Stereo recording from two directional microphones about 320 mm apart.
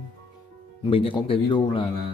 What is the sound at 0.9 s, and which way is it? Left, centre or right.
Speech, centre.